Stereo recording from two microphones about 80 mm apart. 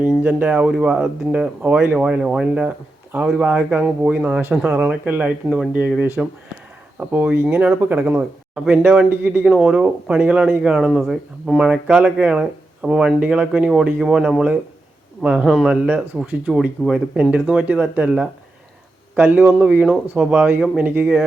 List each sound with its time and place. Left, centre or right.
0.2 s speech: centre
2.0 s speech: centre
6.0 s speech: right
9.5 s speech: centre
10.6 s speech: centre
15.4 s speech: centre
15.7 s speech: centre